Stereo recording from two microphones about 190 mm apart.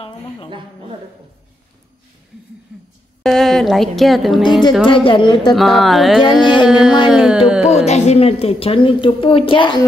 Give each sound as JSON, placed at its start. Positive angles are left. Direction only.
{"t": 3.2, "sound": "a woman's voice", "side_deg": 0}
{"t": 4.8, "sound": "a woman's voice", "side_deg": 25}
{"t": 5.5, "sound": "a woman's voice", "side_deg": 0}
{"t": 7.6, "sound": "a woman's voice", "side_deg": 35}